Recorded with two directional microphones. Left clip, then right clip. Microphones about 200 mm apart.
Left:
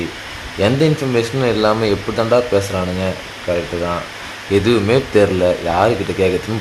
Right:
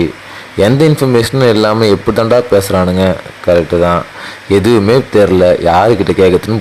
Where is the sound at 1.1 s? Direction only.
35° right (ahead or behind).